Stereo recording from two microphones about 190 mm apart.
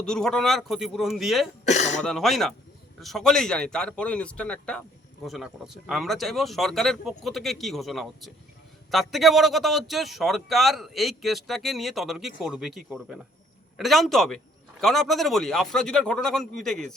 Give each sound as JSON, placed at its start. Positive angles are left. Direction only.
{"t": 0.0, "sound": "a man's voice", "side_deg": 5}
{"t": 1.6, "sound": "speech", "side_deg": 35}
{"t": 2.0, "sound": "a man's voice", "side_deg": 0}